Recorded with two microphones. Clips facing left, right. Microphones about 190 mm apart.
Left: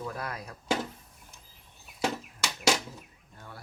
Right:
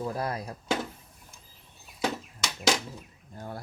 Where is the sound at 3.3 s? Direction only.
45° right (ahead or behind).